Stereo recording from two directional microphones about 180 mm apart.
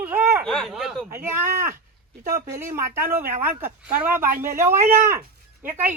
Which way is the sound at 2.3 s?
50° right (ahead or behind).